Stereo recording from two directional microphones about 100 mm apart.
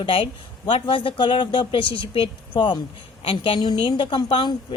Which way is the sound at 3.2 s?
65° left (ahead or behind).